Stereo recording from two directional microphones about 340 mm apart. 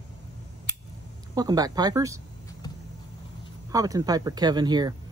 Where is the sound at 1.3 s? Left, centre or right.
Centre.